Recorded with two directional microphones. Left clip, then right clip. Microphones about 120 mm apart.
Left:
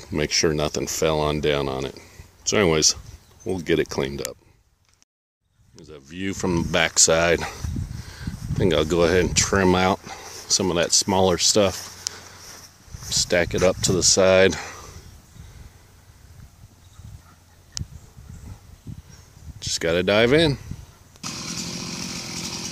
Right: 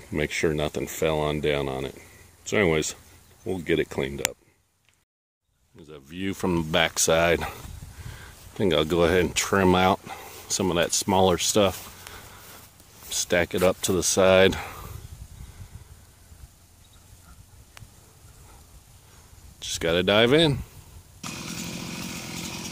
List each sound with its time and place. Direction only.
0.4 s speech: 5° left (ahead or behind)
5.9 s speech: 5° right (ahead or behind)
12.1 s a sound: centre (ahead or behind)
19.6 s speech: 5° right (ahead or behind)
21.2 s chainsaw: 25° right (ahead or behind)